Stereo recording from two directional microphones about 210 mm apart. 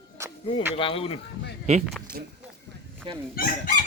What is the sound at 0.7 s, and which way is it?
Speech, 25° left (ahead or behind).